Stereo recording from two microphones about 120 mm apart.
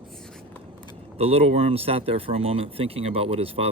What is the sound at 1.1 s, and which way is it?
Speech, 55° right (ahead or behind).